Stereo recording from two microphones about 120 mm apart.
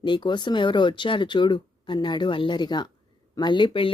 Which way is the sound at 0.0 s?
40° left (ahead or behind).